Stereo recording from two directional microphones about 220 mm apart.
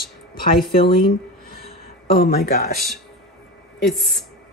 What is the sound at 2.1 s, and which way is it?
Speech, 45° left (ahead or behind).